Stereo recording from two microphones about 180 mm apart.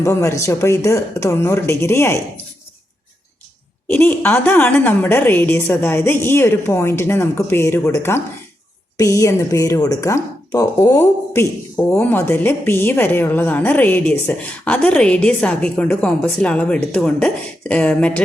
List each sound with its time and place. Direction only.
0.0 s a woman's voice: 15° left (ahead or behind)
3.8 s a woman's voice: 10° left (ahead or behind)